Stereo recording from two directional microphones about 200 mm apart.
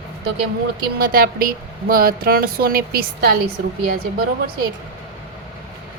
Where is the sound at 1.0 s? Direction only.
45° right (ahead or behind).